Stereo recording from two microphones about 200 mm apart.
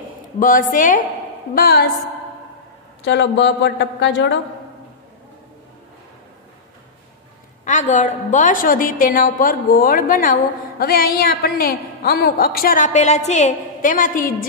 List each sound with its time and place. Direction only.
0.4 s a woman's voice: 40° left (ahead or behind)
3.1 s speech: 60° left (ahead or behind)
7.6 s a woman's voice: 35° left (ahead or behind)